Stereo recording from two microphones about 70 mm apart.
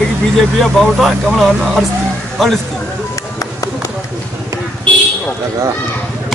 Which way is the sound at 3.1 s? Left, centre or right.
Left.